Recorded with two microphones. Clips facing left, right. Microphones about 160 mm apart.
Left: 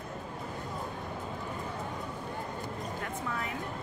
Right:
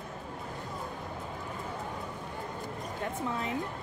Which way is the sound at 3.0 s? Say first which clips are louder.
Right 6 dB; 25° right (ahead or behind).